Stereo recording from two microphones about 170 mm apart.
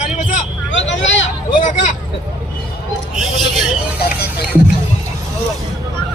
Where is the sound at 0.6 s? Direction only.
90° left.